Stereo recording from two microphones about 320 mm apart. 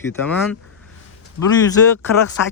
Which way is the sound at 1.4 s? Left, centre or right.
Left.